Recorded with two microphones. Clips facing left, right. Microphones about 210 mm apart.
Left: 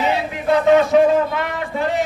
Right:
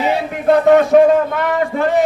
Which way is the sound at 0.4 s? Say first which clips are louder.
Right 3 dB; 50° right (ahead or behind).